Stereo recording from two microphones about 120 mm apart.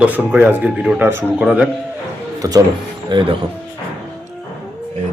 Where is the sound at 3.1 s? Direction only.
40° right (ahead or behind).